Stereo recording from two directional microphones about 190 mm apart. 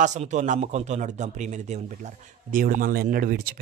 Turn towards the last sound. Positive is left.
turn(degrees=-50)  # may be behind; listen again after turning